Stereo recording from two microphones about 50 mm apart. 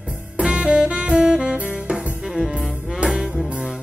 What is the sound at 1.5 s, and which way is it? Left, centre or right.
Music, right.